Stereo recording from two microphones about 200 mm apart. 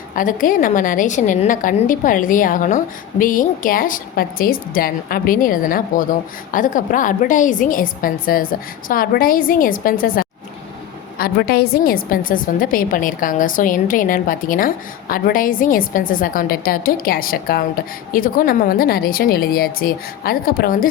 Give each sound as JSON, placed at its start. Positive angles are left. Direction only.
{"t": 0.2, "sound": "a woman's voice", "side_deg": 40}